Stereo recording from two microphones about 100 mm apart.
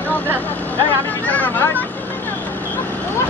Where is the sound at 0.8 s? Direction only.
15° left (ahead or behind).